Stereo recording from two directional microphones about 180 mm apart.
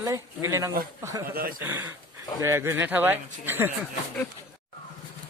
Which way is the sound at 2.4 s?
15° right (ahead or behind).